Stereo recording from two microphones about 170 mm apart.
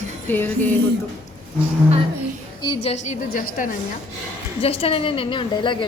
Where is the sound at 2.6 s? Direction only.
35° left (ahead or behind); by 3.8 s 50° left (ahead or behind).